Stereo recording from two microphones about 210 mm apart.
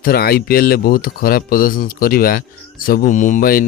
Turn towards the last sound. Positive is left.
turn(degrees=45)  # may be behind; listen again after turning